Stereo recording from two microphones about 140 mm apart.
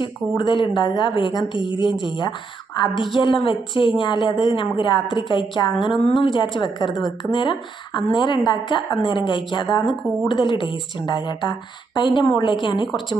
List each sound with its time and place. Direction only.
0.4 s a woman's voice: 35° left (ahead or behind)